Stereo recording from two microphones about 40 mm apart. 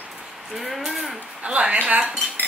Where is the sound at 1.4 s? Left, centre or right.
Right.